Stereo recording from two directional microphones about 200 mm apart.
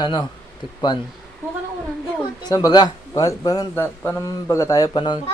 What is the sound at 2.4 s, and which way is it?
A child's voice, 20° left (ahead or behind).